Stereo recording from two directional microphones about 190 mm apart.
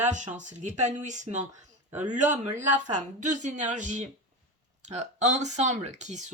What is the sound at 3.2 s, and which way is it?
Speech, 40° right (ahead or behind).